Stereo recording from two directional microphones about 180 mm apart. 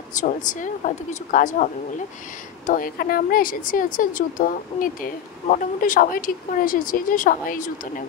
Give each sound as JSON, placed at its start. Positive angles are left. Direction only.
{"t": 0.1, "sound": "speech", "side_deg": 45}